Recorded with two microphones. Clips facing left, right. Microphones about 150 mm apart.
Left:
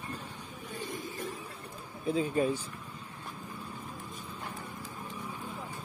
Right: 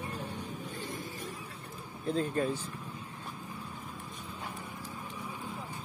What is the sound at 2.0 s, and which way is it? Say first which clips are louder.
Speech: left 2 dB; 5° left (ahead or behind).